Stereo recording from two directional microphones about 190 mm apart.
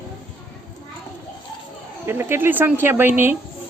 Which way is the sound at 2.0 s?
15° right (ahead or behind).